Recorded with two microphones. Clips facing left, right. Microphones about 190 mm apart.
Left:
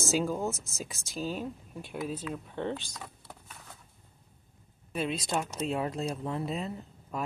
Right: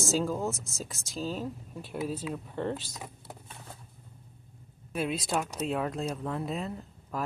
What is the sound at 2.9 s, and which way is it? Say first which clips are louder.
Vehicle: right 2 dB; 20° right (ahead or behind).